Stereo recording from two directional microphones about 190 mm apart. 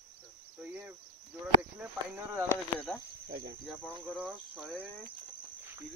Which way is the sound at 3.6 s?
Centre (ahead or behind).